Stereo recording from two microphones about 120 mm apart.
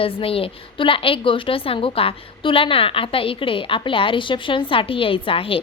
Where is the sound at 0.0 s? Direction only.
50° left (ahead or behind).